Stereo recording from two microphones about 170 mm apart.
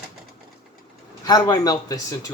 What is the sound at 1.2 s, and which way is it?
A man's voice, 25° left (ahead or behind).